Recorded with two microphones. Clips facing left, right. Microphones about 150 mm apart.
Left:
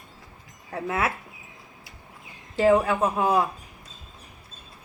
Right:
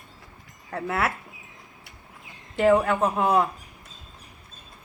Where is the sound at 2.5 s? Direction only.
30° left (ahead or behind).